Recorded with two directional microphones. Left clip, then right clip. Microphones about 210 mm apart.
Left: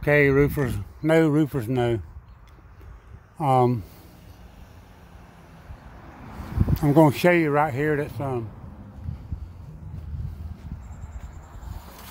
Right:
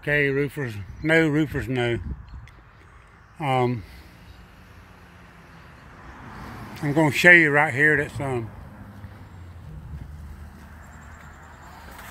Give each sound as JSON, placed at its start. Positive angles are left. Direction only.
{"t": 0.0, "sound": "speech", "side_deg": 25}
{"t": 0.6, "sound": "speech", "side_deg": 15}
{"t": 3.3, "sound": "speech", "side_deg": 15}
{"t": 6.7, "sound": "speech", "side_deg": 25}
{"t": 7.1, "sound": "speech", "side_deg": 10}